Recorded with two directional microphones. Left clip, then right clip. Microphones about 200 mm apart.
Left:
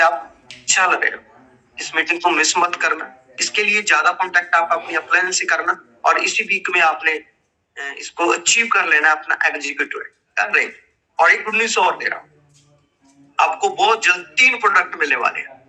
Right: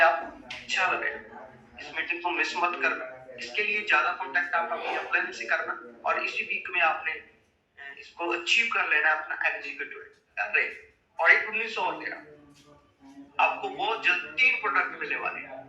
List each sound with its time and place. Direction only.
0.0 s a sound: 50° left (ahead or behind)
1.7 s a man's voice: 45° left (ahead or behind)
13.3 s a man's voice: 50° left (ahead or behind)